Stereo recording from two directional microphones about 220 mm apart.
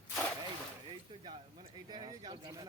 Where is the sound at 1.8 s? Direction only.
20° right (ahead or behind).